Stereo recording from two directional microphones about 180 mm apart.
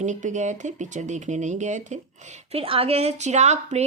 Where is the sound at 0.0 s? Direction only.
40° right (ahead or behind).